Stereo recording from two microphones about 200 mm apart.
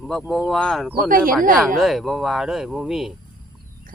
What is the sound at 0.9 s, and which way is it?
Speech, 45° right (ahead or behind).